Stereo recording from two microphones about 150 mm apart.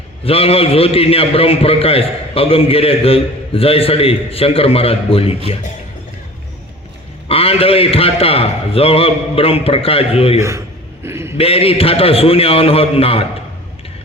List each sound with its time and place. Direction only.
0.3 s a man's voice: 40° left (ahead or behind)
7.3 s a man's voice: 40° left (ahead or behind)
11.0 s a sound: 15° right (ahead or behind)
11.3 s a man's voice: 40° left (ahead or behind)